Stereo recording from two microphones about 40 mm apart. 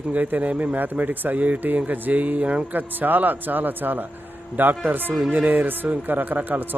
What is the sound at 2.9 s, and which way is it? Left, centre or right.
Speech, right.